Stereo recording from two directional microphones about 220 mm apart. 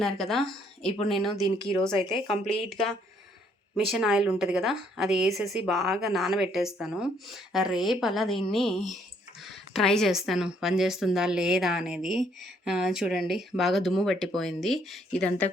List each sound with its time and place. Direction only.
0.0 s a woman's voice: centre (ahead or behind)
2.0 s a woman's voice: 20° left (ahead or behind)
3.8 s a woman's voice: centre (ahead or behind)